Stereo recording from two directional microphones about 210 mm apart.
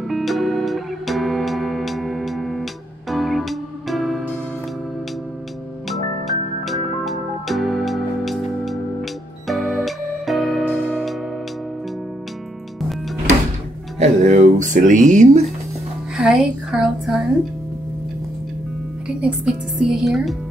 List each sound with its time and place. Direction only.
0.1 s music: centre (ahead or behind)
5.9 s music: centre (ahead or behind)
13.9 s music: 35° right (ahead or behind)
16.2 s a woman's voice: 5° right (ahead or behind)
19.2 s speech: 5° right (ahead or behind)